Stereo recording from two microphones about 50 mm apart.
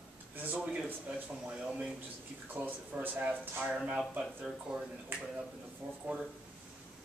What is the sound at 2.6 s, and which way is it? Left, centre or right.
Speech, right.